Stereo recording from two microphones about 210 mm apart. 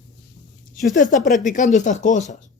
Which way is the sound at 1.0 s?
35° left (ahead or behind).